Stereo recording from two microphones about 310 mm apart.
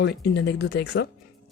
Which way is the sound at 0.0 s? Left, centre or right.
Left.